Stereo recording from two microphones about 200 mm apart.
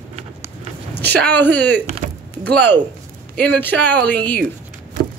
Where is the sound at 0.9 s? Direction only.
55° right (ahead or behind).